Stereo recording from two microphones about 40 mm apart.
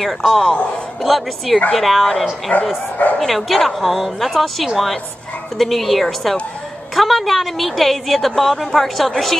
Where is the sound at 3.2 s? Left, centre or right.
Centre.